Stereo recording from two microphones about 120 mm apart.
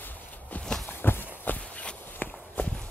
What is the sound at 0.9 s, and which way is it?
Walk, 15° left (ahead or behind).